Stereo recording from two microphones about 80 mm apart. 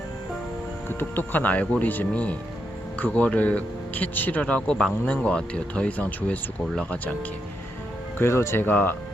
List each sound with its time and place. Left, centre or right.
0.9 s speech: left
8.2 s speech: left